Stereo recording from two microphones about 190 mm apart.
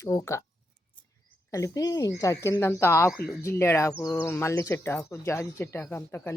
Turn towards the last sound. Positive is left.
turn(degrees=10)  # may be behind; listen again after turning